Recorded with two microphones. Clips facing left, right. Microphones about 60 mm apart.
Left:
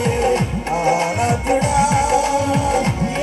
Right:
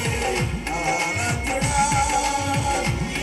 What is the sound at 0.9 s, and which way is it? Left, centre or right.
Music, left.